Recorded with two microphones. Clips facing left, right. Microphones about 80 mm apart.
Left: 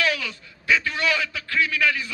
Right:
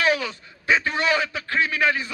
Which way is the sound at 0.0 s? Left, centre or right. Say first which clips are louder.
Right 3 dB; right.